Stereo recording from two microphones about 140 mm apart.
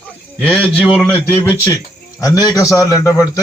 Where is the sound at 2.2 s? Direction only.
25° left (ahead or behind).